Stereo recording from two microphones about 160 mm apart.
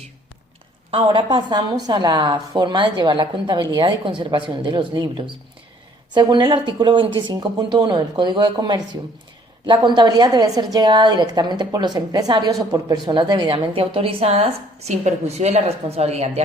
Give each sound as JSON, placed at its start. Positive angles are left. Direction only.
{"t": 0.9, "sound": "a woman's voice", "side_deg": -30}